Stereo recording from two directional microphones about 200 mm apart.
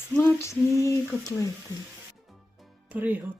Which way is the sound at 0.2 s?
15° left (ahead or behind).